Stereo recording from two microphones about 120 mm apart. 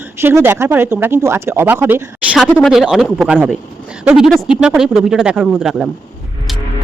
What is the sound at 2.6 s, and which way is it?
Speech, 5° right (ahead or behind).